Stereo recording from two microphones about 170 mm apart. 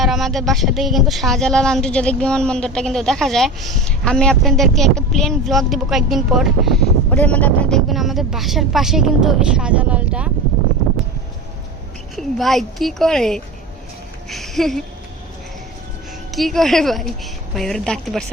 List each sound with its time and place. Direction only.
0.0 s speech: centre (ahead or behind)
12.1 s speech: centre (ahead or behind)
14.3 s a sound: centre (ahead or behind)
16.3 s speech: centre (ahead or behind)